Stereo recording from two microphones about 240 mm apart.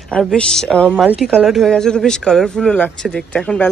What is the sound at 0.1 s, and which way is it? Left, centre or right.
A woman's voice, centre.